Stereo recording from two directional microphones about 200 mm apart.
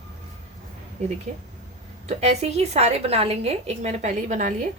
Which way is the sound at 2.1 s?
30° right (ahead or behind).